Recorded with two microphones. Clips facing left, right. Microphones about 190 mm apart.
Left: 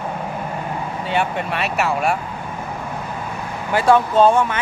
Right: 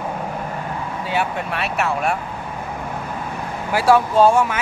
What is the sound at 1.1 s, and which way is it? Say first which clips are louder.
Speech: left 2 dB; centre (ahead or behind).